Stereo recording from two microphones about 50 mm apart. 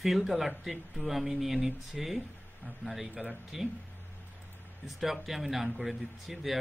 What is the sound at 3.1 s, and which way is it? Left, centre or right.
Speech, right.